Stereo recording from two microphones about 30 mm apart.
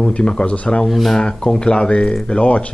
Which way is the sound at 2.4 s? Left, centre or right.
Left.